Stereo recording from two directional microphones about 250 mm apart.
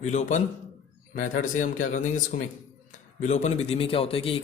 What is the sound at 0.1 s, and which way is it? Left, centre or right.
A man's voice, left.